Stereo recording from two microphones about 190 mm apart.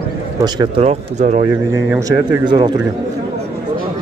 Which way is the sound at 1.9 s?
15° right (ahead or behind).